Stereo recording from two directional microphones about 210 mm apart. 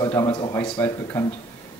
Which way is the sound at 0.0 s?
20° left (ahead or behind).